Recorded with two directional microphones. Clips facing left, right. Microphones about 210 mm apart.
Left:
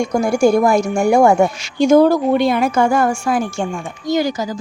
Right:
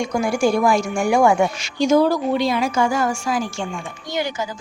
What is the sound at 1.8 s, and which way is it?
A woman's voice, 55° left (ahead or behind).